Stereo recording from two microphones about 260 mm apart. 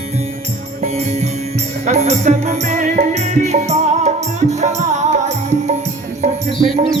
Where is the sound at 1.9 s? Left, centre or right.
Right.